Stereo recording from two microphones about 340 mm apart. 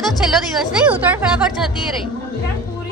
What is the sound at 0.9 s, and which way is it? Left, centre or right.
Speech, centre.